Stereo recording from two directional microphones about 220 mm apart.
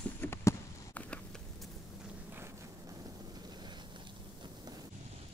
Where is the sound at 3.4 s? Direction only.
20° right (ahead or behind).